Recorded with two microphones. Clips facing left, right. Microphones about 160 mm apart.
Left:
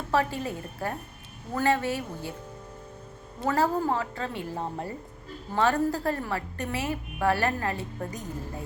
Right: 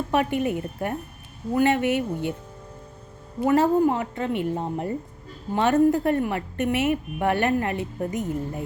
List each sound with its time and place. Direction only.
0.1 s a woman's voice: 20° right (ahead or behind)
3.4 s a woman's voice: 20° right (ahead or behind)